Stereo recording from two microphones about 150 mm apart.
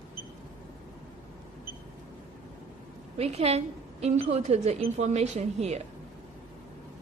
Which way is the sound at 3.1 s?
45° right (ahead or behind).